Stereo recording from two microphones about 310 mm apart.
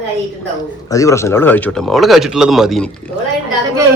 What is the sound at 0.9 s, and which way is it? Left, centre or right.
Speech, centre.